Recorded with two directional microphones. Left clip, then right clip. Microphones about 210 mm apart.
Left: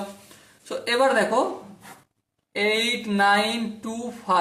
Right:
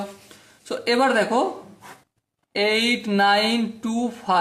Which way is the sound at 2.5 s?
45° right (ahead or behind).